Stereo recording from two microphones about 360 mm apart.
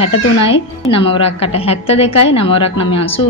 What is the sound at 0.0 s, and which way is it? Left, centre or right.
A woman's voice, centre.